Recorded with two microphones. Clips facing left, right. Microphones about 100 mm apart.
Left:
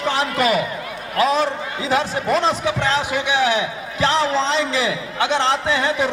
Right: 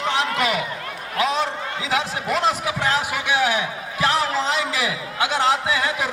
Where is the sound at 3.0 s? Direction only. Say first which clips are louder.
Left 2 dB; 25° left (ahead or behind).